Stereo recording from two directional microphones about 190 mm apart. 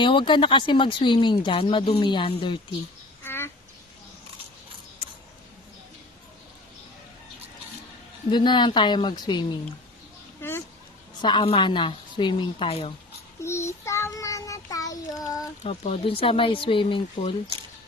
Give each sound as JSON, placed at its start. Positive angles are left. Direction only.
{"t": 0.0, "sound": "speech", "side_deg": 25}
{"t": 3.2, "sound": "a sound", "side_deg": 10}
{"t": 8.3, "sound": "speech", "side_deg": 25}
{"t": 10.4, "sound": "a sound", "side_deg": 10}
{"t": 11.2, "sound": "speech", "side_deg": 25}
{"t": 13.4, "sound": "child singing", "side_deg": 15}
{"t": 15.6, "sound": "speech", "side_deg": 35}